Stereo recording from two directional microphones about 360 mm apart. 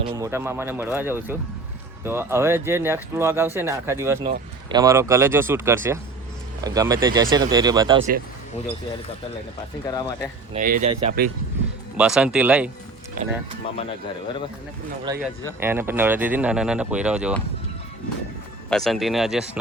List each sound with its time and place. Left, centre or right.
0.0 s speech: centre
9.8 s speech: centre
10.5 s speech: right
11.9 s speech: centre
13.2 s speech: right
15.1 s speech: centre
18.7 s speech: centre